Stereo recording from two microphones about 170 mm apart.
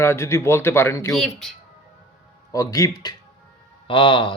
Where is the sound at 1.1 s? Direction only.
5° left (ahead or behind).